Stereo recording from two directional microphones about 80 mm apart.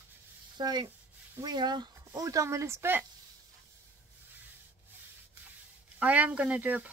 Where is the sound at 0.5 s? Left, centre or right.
Right.